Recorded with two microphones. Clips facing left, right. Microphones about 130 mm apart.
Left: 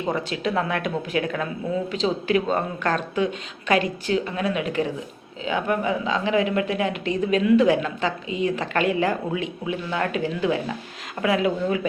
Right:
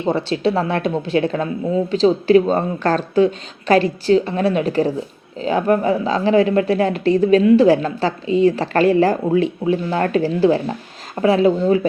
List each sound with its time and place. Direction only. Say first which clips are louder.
0.0 s speech: right 7 dB; 30° right (ahead or behind)